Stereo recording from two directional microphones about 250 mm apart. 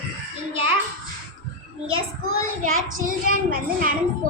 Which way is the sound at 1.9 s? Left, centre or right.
Right.